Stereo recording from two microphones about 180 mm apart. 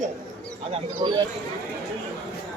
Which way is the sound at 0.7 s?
25° right (ahead or behind).